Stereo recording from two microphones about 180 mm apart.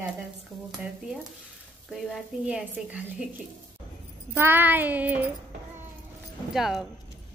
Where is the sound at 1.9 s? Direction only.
Centre (ahead or behind).